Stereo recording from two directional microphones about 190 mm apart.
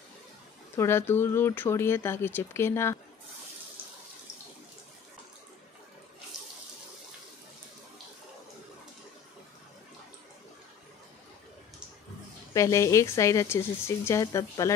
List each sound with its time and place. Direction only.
0.7 s speech: 15° left (ahead or behind)
12.5 s speech: 15° left (ahead or behind)